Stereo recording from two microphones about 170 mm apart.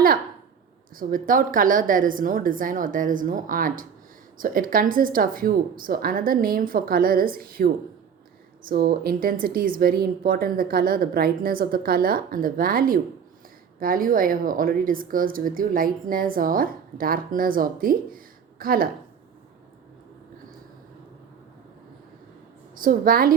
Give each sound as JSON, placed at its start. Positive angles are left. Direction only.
{"t": 0.9, "sound": "a woman's voice", "side_deg": -55}
{"t": 22.7, "sound": "a woman's voice", "side_deg": -55}